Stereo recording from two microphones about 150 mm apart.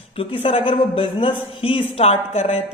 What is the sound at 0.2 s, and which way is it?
A woman's voice, 40° left (ahead or behind).